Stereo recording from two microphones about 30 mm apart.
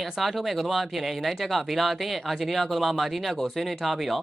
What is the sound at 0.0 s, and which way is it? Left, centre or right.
Speech, centre.